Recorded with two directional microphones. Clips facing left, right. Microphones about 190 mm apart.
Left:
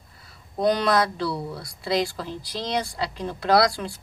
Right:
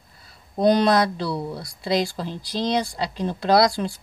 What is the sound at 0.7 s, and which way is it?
Mantra, 35° right (ahead or behind).